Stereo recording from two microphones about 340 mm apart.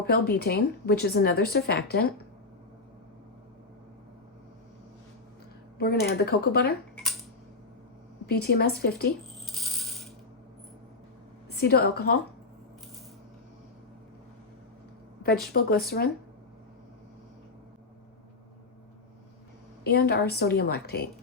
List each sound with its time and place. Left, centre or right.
0.1 s speech: left
5.7 s speech: left
8.3 s speech: left
9.5 s coin: centre
11.6 s speech: left
15.6 s speech: left
19.8 s speech: left